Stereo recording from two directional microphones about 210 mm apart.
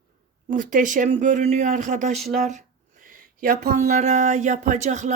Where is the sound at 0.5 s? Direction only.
40° right (ahead or behind).